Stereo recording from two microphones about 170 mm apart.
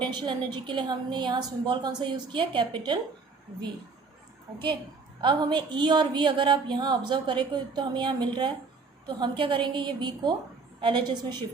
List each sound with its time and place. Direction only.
0.0 s a woman's voice: 25° right (ahead or behind)
5.2 s a woman's voice: 30° right (ahead or behind)